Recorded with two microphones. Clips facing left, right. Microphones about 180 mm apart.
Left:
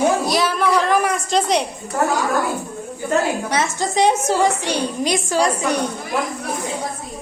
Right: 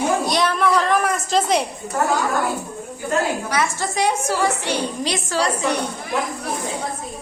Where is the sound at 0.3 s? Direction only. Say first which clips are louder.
Left 1 dB; centre (ahead or behind).